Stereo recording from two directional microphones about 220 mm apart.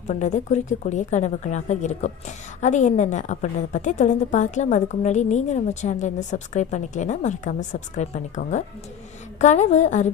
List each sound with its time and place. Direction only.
0.1 s a woman's voice: 30° left (ahead or behind)